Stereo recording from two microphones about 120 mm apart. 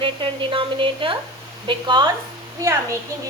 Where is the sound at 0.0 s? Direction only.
45° right (ahead or behind).